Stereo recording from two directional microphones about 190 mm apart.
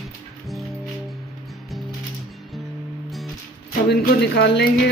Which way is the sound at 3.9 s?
55° left (ahead or behind).